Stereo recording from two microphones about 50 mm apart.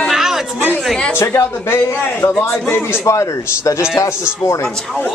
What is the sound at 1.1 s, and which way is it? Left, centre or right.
Speech, left.